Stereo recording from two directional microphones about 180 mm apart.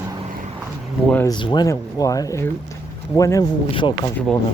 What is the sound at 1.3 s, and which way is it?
Speech, 25° left (ahead or behind).